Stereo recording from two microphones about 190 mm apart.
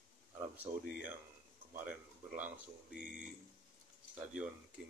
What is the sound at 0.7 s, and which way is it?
Speech, 30° right (ahead or behind).